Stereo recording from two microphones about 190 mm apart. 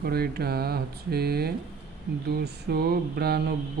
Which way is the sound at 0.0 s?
55° right (ahead or behind).